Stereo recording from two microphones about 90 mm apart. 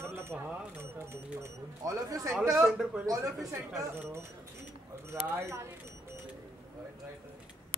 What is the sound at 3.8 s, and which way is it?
Speech, 30° right (ahead or behind).